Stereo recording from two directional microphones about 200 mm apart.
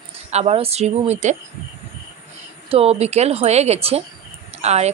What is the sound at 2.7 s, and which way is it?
A woman's voice, 30° right (ahead or behind).